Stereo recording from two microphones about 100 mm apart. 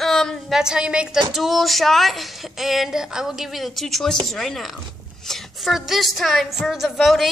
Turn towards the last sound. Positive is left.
turn(degrees=0)  # may be behind; listen again after turning